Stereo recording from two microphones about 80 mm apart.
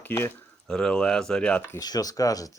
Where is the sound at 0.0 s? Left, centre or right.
Left.